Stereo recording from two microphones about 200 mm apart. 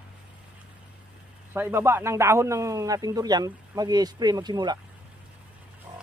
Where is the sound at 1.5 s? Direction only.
10° right (ahead or behind).